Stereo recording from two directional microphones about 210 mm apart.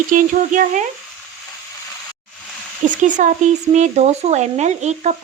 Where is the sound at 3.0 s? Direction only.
35° right (ahead or behind).